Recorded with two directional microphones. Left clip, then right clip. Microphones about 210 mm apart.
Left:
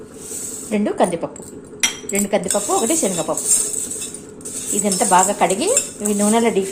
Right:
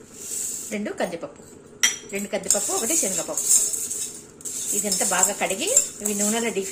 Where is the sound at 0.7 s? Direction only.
5° left (ahead or behind).